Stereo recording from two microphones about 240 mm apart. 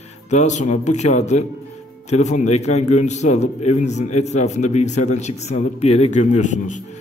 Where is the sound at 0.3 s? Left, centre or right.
Left.